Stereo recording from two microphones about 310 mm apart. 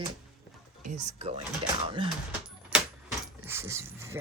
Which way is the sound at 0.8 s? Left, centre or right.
Right.